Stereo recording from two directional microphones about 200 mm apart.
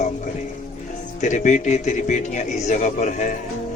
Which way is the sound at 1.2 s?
35° left (ahead or behind).